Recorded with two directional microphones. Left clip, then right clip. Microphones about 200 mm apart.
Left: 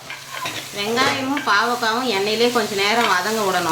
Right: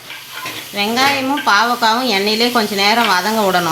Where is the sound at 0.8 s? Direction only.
45° right (ahead or behind).